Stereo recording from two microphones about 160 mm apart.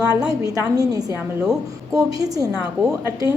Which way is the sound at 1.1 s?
5° right (ahead or behind).